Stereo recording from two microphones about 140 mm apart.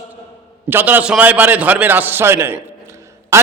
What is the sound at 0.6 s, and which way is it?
A man's voice, 15° right (ahead or behind).